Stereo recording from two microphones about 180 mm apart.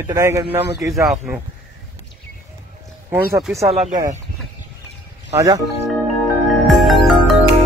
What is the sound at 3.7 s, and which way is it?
Speech, 35° right (ahead or behind).